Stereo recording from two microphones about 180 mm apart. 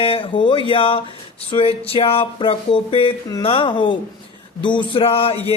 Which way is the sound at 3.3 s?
30° left (ahead or behind).